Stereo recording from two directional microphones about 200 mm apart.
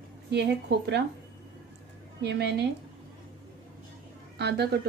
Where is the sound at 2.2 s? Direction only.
60° right (ahead or behind).